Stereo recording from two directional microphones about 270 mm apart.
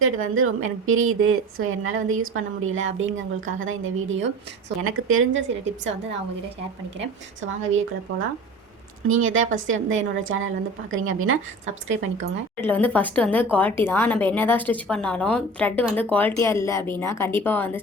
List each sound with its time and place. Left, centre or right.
0.0 s a woman's voice: right
7.4 s a woman's voice: right
9.0 s a woman's voice: right
12.6 s speech: centre